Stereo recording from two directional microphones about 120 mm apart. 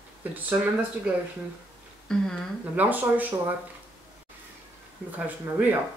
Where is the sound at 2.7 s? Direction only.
15° right (ahead or behind).